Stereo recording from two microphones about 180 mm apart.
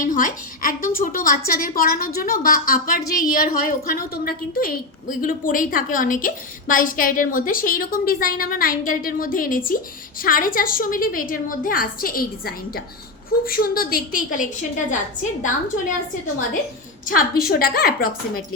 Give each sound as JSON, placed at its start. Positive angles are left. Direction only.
{"t": 0.0, "sound": "a woman's voice", "side_deg": 50}
{"t": 17.1, "sound": "a woman's voice", "side_deg": 55}